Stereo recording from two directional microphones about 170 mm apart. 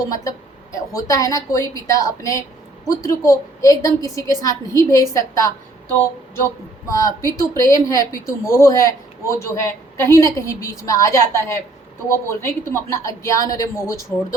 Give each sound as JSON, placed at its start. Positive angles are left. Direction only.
{"t": 0.1, "sound": "a woman's voice", "side_deg": 20}